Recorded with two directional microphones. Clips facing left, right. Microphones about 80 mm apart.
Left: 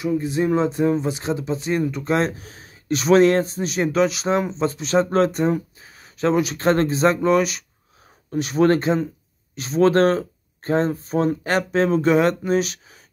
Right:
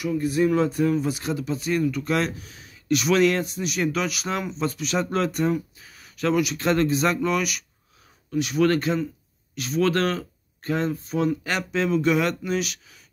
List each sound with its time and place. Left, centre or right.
0.0 s speech: left